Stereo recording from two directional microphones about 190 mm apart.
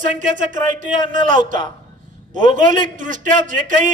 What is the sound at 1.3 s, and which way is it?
Speech, 25° left (ahead or behind).